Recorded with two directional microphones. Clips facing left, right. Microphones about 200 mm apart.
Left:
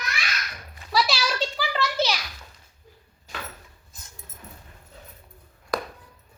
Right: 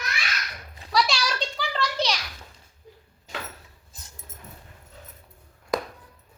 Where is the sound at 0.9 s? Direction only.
5° left (ahead or behind).